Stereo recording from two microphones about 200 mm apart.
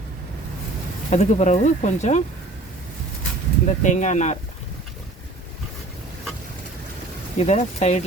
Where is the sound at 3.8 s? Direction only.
40° left (ahead or behind).